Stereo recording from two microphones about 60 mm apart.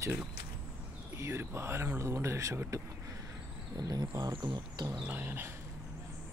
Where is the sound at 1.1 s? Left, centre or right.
Right.